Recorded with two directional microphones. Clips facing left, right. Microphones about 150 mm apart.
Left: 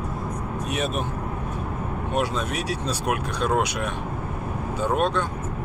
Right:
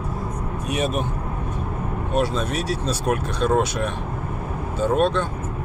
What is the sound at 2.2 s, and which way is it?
Speech, 15° left (ahead or behind).